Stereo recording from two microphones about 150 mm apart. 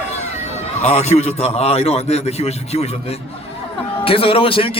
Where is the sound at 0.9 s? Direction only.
45° left (ahead or behind).